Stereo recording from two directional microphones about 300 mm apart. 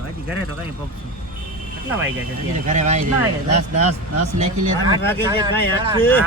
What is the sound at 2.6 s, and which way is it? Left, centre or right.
Speech, right.